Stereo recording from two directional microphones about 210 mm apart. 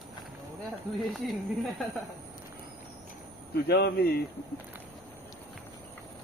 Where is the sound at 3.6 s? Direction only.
50° left (ahead or behind).